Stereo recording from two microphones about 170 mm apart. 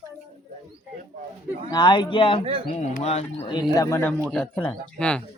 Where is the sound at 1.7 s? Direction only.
25° left (ahead or behind).